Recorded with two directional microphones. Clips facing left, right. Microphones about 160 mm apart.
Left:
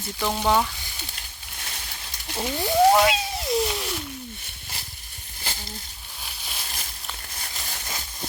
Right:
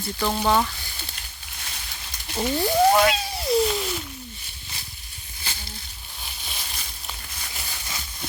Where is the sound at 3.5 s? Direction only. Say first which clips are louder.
Right 4 dB; centre (ahead or behind).